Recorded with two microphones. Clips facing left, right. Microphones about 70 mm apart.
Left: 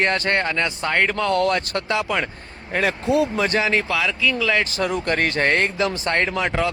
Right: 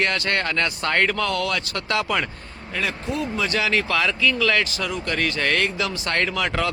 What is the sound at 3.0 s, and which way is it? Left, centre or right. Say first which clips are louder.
Speech: left 8 dB; left.